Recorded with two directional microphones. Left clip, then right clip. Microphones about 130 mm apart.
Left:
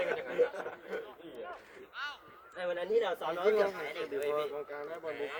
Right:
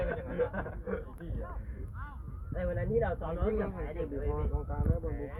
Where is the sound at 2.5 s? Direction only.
15° left (ahead or behind).